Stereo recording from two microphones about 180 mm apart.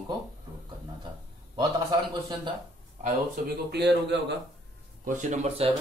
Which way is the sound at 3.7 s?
70° right (ahead or behind).